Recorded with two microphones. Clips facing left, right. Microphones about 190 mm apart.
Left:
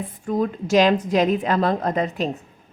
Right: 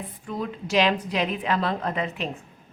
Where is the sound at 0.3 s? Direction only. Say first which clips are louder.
Left 8 dB; 45° left (ahead or behind).